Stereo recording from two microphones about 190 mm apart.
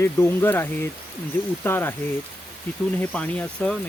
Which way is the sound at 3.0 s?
5° left (ahead or behind).